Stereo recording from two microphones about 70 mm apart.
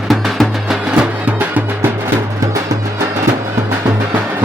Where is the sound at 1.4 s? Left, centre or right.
Right.